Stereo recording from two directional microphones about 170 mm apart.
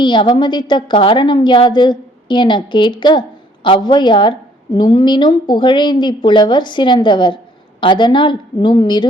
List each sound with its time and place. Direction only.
0.0 s a woman's voice: 25° left (ahead or behind)